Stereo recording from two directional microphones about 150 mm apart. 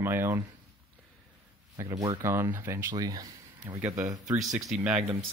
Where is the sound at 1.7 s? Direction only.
25° right (ahead or behind).